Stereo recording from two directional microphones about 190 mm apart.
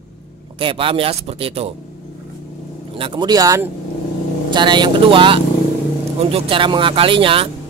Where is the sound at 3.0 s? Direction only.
25° right (ahead or behind).